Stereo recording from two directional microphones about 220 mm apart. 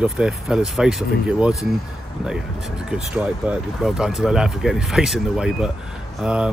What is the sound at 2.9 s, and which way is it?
Speech, 5° right (ahead or behind).